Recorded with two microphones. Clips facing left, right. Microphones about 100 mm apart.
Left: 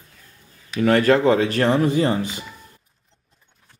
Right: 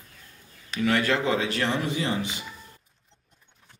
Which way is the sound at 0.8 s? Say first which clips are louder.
Left 8 dB; 45° left (ahead or behind).